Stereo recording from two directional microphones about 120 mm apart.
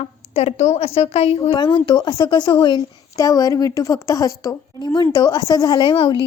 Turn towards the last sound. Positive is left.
turn(degrees=45)  # may be behind; listen again after turning